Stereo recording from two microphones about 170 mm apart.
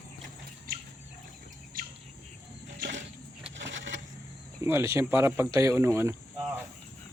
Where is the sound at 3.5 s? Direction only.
90° right.